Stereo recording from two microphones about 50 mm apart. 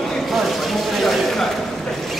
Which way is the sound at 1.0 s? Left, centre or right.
Centre.